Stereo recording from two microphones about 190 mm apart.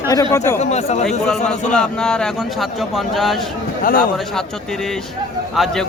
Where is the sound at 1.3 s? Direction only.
5° left (ahead or behind).